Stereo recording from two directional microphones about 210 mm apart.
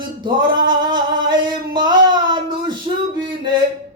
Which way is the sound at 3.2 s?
25° right (ahead or behind).